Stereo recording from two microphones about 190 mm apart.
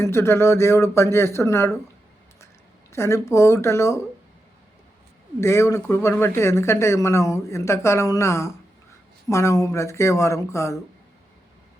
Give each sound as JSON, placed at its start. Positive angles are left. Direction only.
{"t": 0.0, "sound": "speech", "side_deg": 15}
{"t": 2.9, "sound": "speech", "side_deg": 15}
{"t": 5.4, "sound": "speech", "side_deg": 15}